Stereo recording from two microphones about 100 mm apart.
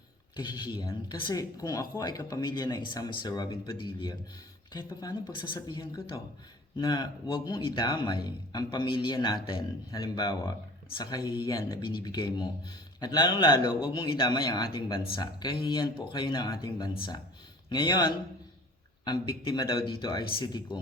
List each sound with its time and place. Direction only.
0.3 s speech: 50° left (ahead or behind)
4.7 s a man's voice: 40° left (ahead or behind)